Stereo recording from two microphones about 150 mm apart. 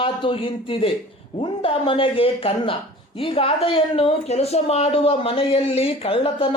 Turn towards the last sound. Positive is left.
turn(degrees=40)  # may be behind; listen again after turning